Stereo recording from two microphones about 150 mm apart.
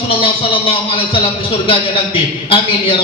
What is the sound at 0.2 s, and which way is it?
Speech, 40° left (ahead or behind).